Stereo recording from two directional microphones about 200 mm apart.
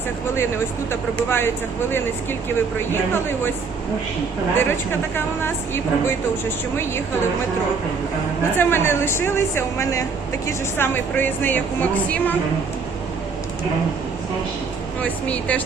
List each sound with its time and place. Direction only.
0.9 s speech: 10° left (ahead or behind)
2.9 s speech: 10° left (ahead or behind)
4.5 s speech: 10° left (ahead or behind)
8.5 s speech: 10° left (ahead or behind)
15.0 s speech: 5° left (ahead or behind)